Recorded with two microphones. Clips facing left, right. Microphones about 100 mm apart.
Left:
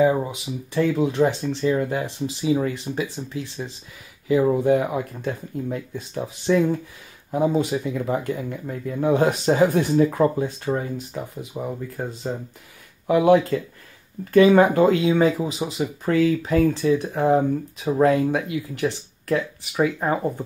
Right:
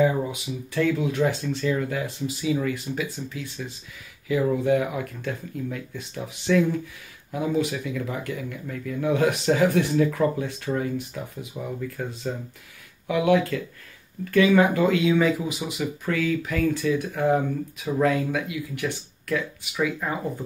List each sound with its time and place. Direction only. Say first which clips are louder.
0.0 s speech: left 3 dB; 25° left (ahead or behind)